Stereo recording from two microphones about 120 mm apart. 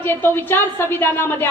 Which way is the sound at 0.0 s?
15° left (ahead or behind).